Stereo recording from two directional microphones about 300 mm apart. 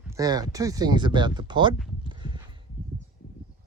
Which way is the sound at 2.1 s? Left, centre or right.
Centre.